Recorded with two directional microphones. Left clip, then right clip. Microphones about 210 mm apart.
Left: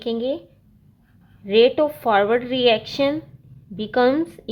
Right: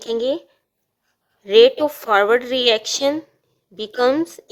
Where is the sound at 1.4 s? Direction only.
35° right (ahead or behind).